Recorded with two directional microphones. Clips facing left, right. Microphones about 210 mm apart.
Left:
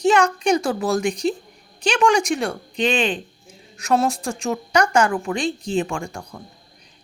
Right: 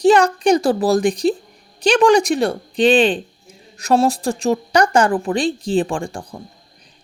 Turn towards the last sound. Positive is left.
turn(degrees=-30)  # may be behind; listen again after turning